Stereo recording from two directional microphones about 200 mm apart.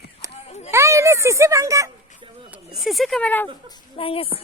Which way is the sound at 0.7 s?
15° right (ahead or behind).